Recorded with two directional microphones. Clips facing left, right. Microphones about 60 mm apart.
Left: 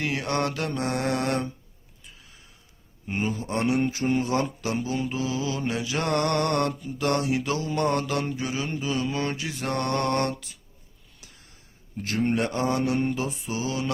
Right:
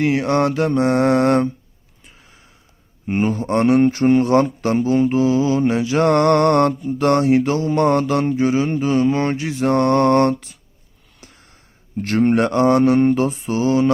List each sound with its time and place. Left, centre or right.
0.0 s speech: right
2.0 s gasp: right
3.1 s speech: right
11.2 s a sound: right
12.0 s mantra: right